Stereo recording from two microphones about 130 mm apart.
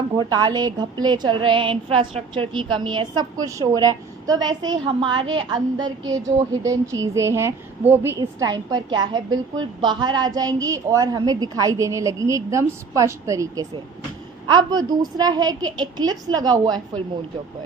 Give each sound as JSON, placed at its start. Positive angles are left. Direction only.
{"t": 0.2, "sound": "a woman's voice", "side_deg": -35}
{"t": 8.2, "sound": "a woman's voice", "side_deg": -30}